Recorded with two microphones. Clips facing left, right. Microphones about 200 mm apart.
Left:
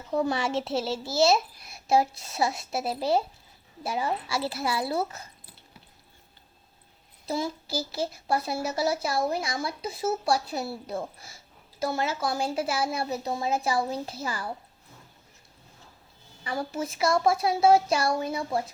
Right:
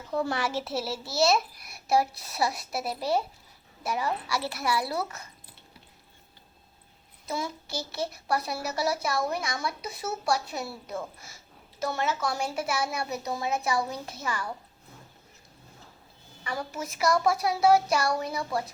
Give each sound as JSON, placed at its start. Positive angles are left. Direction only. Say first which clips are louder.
{"t": 0.1, "sound": "a child's voice", "louder": "left 3 dB", "side_deg": 20}
{"t": 7.3, "sound": "a child's voice", "louder": "left 3 dB", "side_deg": 30}
{"t": 16.4, "sound": "a child's voice", "louder": "left 3 dB", "side_deg": 30}